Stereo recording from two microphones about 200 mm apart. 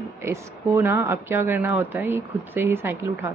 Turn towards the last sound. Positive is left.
turn(degrees=-10)  # may be behind; listen again after turning